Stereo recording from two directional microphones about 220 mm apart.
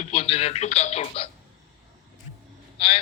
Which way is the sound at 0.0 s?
25° left (ahead or behind).